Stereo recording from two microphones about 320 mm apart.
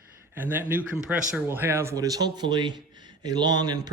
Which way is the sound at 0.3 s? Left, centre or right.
Centre.